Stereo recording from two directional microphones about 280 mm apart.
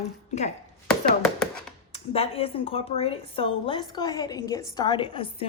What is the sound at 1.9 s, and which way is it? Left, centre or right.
A woman's voice, left.